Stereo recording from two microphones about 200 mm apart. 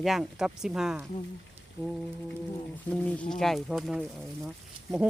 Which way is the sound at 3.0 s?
5° left (ahead or behind).